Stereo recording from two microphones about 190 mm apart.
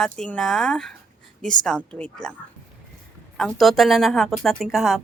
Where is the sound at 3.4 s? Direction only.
Centre (ahead or behind).